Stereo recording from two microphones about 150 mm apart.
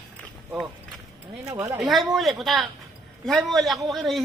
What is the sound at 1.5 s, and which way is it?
Speech, 15° right (ahead or behind).